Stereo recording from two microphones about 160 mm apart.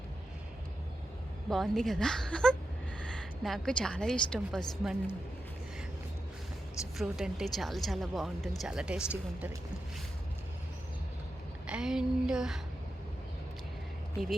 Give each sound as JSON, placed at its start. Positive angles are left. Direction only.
{"t": 1.5, "sound": "a woman's voice", "side_deg": 0}
{"t": 6.9, "sound": "speech", "side_deg": 0}
{"t": 11.6, "sound": "a sound", "side_deg": -5}